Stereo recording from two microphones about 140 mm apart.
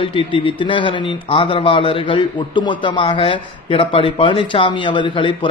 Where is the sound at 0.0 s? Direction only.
40° left (ahead or behind).